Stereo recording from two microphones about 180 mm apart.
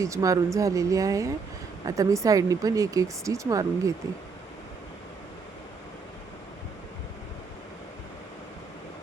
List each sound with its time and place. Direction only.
0.0 s speech: 20° right (ahead or behind)